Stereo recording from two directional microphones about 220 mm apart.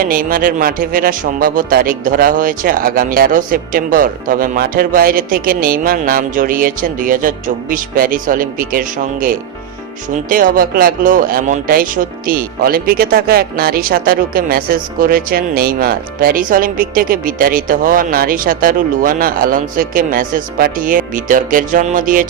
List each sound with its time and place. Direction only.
0.0 s speech: 40° right (ahead or behind)